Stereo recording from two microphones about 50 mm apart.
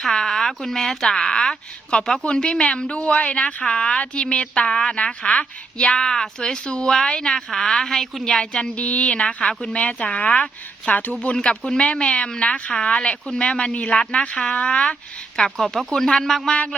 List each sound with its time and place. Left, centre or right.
0.0 s a woman's voice: centre
8.7 s a woman's voice: left
10.9 s speech: left
11.3 s a woman's voice: centre
15.4 s speech: centre